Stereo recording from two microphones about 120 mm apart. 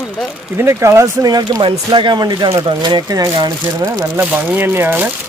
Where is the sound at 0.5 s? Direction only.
20° right (ahead or behind).